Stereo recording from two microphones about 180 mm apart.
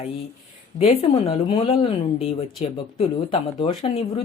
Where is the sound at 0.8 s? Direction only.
35° left (ahead or behind).